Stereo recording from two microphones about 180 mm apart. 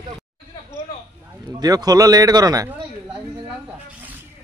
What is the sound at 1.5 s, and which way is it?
Speech, 20° right (ahead or behind).